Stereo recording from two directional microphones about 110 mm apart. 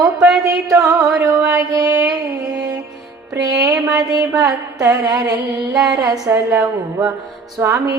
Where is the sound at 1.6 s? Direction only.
35° right (ahead or behind).